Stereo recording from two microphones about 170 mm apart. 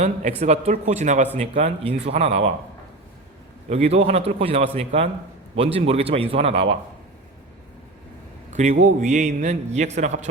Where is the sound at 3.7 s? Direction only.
40° right (ahead or behind).